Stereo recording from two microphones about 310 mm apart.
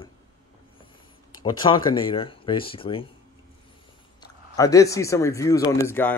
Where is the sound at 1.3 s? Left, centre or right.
Centre.